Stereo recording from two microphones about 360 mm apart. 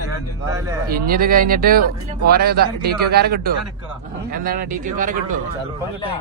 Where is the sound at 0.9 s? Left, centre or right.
Right.